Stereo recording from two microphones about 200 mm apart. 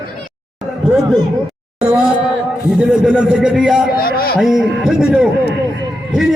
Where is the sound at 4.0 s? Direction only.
45° left (ahead or behind).